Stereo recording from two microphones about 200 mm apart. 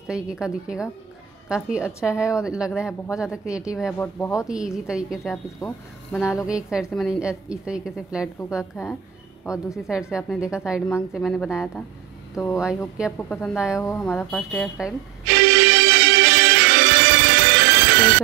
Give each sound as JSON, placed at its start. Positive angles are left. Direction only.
{"t": 0.1, "sound": "a woman's voice", "side_deg": -5}
{"t": 4.0, "sound": "speech", "side_deg": 15}
{"t": 4.5, "sound": "a woman's voice", "side_deg": -5}
{"t": 5.6, "sound": "speech", "side_deg": 15}
{"t": 6.4, "sound": "a woman's voice", "side_deg": -5}
{"t": 9.4, "sound": "speech", "side_deg": 15}
{"t": 9.8, "sound": "a woman's voice", "side_deg": -5}
{"t": 10.9, "sound": "a woman's voice", "side_deg": 10}
{"t": 13.3, "sound": "speech", "side_deg": 10}
{"t": 14.1, "sound": "a woman's voice", "side_deg": 5}
{"t": 15.3, "sound": "music", "side_deg": -55}